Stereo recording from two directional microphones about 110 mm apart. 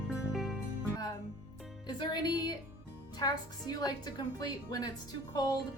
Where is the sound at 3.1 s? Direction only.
40° left (ahead or behind).